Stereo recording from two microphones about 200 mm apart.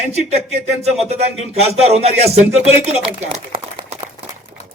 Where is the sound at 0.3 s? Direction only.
35° right (ahead or behind).